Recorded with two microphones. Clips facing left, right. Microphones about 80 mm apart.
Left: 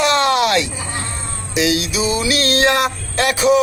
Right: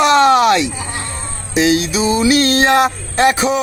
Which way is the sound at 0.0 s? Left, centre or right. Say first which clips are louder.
Right 5 dB; right.